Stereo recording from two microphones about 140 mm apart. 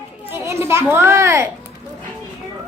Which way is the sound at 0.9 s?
20° right (ahead or behind).